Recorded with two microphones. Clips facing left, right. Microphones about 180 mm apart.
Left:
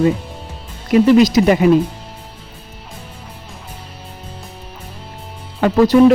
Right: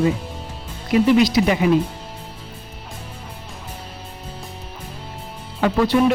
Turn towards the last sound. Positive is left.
turn(degrees=40)  # may be behind; listen again after turning